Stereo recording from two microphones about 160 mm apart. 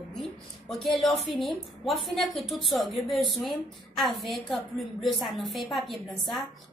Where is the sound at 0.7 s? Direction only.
Centre (ahead or behind).